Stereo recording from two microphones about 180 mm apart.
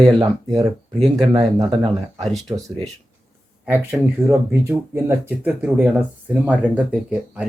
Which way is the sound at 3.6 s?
10° right (ahead or behind).